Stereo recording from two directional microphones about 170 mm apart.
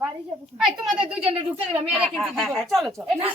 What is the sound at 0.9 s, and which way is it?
Speech, 30° right (ahead or behind).